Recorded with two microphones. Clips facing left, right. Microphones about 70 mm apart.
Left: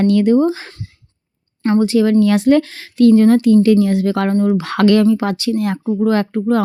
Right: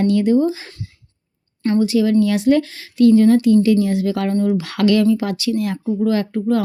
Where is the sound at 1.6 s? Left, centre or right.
Left.